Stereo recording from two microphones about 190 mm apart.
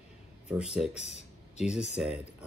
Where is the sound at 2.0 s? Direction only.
5° right (ahead or behind).